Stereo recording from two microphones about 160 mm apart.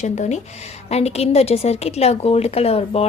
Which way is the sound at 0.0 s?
45° left (ahead or behind).